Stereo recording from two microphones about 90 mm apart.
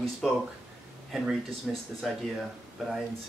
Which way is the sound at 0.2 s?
5° left (ahead or behind).